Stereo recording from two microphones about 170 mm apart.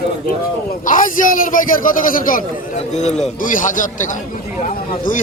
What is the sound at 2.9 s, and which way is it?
A man's voice, 40° left (ahead or behind).